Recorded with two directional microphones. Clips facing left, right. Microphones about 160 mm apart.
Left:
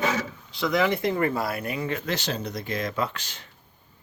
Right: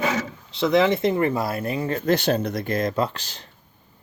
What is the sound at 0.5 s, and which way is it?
Speech, 25° right (ahead or behind).